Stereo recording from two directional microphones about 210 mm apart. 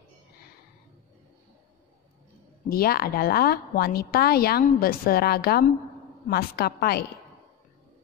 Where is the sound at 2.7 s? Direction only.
45° left (ahead or behind).